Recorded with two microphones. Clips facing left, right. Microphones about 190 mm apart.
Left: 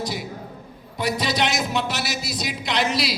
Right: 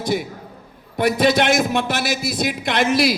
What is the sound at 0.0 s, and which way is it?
A man's voice, 55° right (ahead or behind).